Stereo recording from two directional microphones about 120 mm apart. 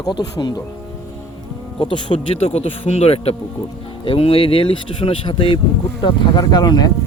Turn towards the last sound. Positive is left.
turn(degrees=35)  # may be behind; listen again after turning